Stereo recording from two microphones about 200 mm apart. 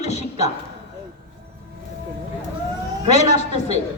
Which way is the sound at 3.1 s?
35° left (ahead or behind).